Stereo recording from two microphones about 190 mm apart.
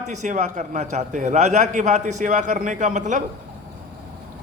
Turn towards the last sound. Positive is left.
turn(degrees=-40)  # may be behind; listen again after turning